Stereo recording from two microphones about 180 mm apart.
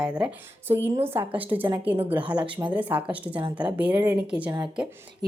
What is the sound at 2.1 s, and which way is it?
A woman's voice, 5° right (ahead or behind).